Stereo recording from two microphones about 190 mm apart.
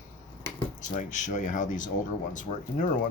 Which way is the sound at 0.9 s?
40° left (ahead or behind).